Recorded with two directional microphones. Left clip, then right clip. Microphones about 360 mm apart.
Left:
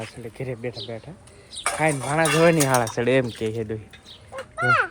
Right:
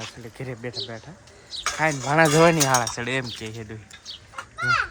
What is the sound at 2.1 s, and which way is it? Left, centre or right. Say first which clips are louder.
Livestock: right 5 dB; right.